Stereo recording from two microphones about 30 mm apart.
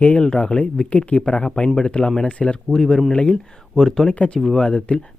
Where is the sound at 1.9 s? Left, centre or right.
Left.